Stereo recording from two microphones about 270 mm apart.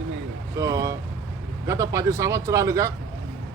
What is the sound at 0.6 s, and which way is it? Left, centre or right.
Vehicle, centre.